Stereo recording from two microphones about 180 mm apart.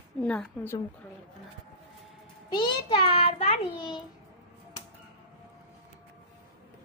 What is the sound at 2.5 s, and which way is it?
A child's voice, 25° left (ahead or behind).